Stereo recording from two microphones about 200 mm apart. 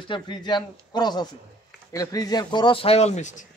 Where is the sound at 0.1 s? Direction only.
25° left (ahead or behind).